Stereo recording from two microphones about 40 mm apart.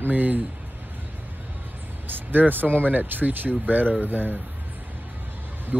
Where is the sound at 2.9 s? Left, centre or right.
Right.